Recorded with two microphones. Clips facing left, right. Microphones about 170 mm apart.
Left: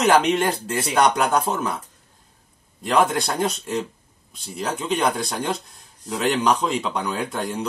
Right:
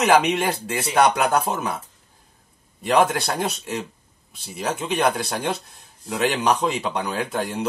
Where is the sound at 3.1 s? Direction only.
5° right (ahead or behind).